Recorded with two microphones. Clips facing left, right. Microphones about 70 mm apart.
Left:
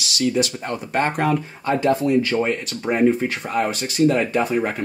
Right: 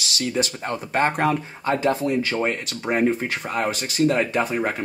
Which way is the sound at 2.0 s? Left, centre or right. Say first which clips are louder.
Left 4 dB; centre.